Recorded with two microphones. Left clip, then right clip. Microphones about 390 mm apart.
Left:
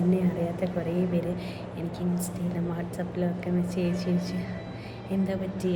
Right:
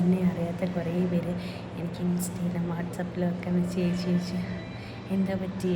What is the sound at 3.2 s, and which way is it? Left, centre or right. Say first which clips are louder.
A woman's voice: left 1 dB; centre.